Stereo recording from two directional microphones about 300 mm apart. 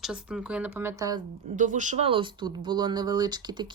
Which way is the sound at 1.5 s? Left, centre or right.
Right.